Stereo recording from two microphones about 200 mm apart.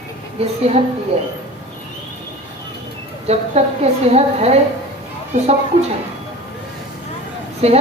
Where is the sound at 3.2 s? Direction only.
30° right (ahead or behind).